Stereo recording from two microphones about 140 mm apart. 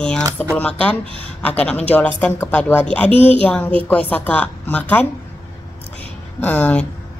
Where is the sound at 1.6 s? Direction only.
10° left (ahead or behind).